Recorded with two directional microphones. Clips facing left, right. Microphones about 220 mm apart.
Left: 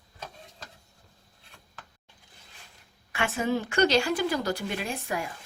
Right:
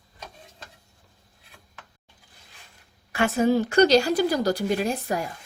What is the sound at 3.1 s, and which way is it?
Speech, 40° right (ahead or behind).